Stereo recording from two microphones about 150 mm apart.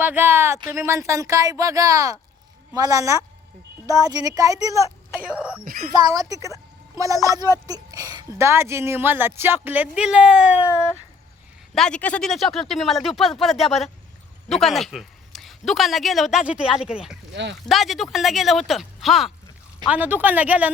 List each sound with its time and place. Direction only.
0.0 s speech: 15° right (ahead or behind)
5.2 s speech: 5° right (ahead or behind)
5.6 s speech: 75° right (ahead or behind)
5.9 s speech: 25° right (ahead or behind); by 10.7 s 10° right (ahead or behind)
10.7 s a sound: 20° left (ahead or behind)
11.7 s speech: 5° left (ahead or behind)
19.9 s speech: 10° right (ahead or behind)